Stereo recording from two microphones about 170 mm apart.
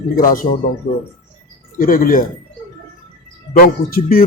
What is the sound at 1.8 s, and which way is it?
Speech, 55° left (ahead or behind).